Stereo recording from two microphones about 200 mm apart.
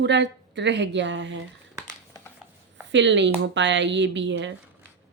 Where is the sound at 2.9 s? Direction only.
65° right (ahead or behind).